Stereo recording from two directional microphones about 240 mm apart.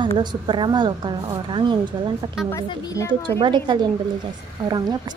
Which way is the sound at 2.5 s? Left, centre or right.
Centre.